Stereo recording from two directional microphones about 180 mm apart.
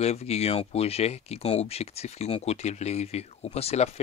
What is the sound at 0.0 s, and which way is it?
Speech, 35° left (ahead or behind).